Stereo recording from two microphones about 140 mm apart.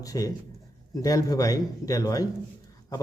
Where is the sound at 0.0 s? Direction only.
25° left (ahead or behind).